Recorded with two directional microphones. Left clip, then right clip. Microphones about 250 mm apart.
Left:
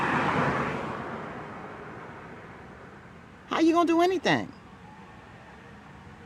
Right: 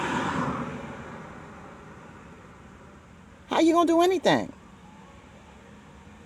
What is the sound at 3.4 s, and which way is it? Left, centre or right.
Speech, centre.